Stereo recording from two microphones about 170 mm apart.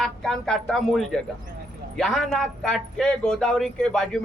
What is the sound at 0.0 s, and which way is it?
Speech, 5° left (ahead or behind).